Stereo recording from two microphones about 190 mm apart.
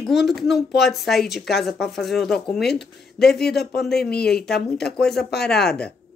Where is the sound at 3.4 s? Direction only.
60° left (ahead or behind).